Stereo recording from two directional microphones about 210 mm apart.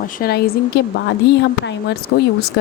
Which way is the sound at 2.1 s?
60° left (ahead or behind).